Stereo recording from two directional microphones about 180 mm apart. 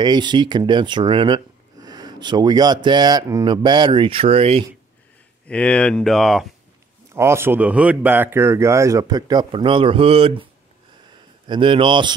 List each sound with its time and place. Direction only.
0.0 s speech: 25° right (ahead or behind)
5.5 s speech: 5° left (ahead or behind)
7.2 s speech: 15° right (ahead or behind)